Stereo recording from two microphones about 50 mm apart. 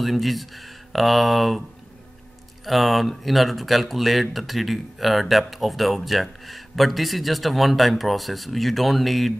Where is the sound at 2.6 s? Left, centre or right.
Centre.